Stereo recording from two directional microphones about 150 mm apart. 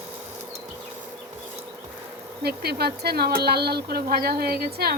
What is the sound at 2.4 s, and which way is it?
A woman's voice, 90° right.